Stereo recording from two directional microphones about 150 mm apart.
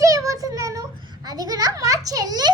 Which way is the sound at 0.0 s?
20° right (ahead or behind).